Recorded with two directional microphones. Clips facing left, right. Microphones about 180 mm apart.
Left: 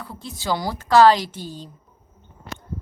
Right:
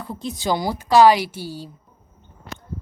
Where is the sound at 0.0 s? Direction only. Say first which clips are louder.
Right 5 dB; 20° right (ahead or behind).